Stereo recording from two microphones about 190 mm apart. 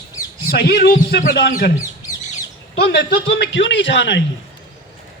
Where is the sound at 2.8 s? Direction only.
65° left (ahead or behind).